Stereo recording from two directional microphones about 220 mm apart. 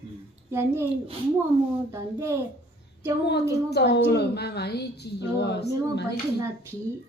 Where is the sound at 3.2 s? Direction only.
50° left (ahead or behind).